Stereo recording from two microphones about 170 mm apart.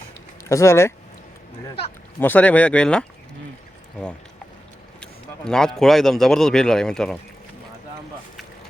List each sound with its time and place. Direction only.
0.4 s speech: 15° left (ahead or behind)
2.1 s speech: 10° left (ahead or behind)
5.5 s a man's voice: 5° left (ahead or behind)